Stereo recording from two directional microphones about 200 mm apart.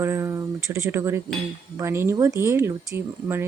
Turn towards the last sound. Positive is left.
turn(degrees=-10)  # may be behind; listen again after turning